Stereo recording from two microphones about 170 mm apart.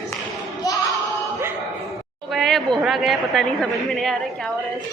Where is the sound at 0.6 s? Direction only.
20° left (ahead or behind).